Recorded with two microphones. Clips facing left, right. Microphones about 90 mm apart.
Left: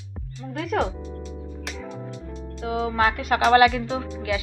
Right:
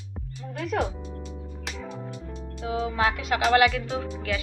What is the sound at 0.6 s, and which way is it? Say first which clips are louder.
Speech: left 3 dB; 70° left (ahead or behind).